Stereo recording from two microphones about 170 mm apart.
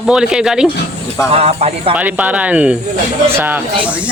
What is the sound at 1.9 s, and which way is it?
Speech, 10° right (ahead or behind).